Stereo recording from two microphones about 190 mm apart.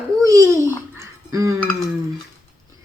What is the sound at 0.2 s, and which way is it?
Speech, 15° right (ahead or behind).